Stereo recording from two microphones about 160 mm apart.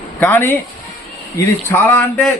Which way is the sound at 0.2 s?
10° left (ahead or behind).